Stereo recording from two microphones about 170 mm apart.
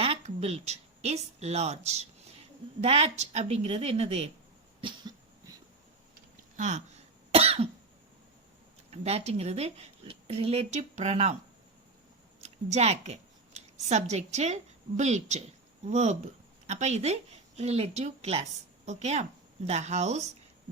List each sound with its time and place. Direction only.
0.0 s speech: 35° right (ahead or behind)
4.8 s cough: 25° right (ahead or behind)
6.6 s cough: 45° right (ahead or behind)
8.9 s speech: 40° right (ahead or behind)
12.4 s a woman's voice: 40° right (ahead or behind)